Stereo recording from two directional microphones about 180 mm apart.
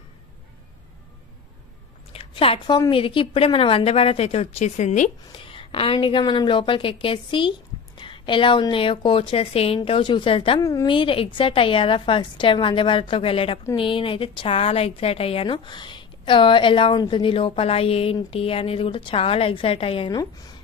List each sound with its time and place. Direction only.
2.1 s a woman's voice: 30° left (ahead or behind)
5.3 s a woman's voice: 30° left (ahead or behind)
10.6 s a woman's voice: 20° left (ahead or behind)